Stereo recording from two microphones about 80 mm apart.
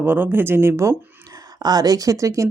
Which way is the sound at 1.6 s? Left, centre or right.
Right.